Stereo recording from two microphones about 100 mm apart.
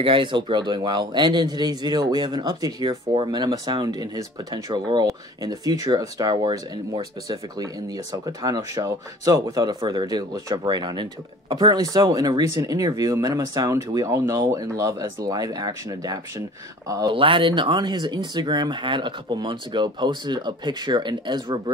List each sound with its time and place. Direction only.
0.0 s speech: 55° right (ahead or behind)
3.4 s speech: 35° right (ahead or behind)
17.1 s speech: 60° right (ahead or behind)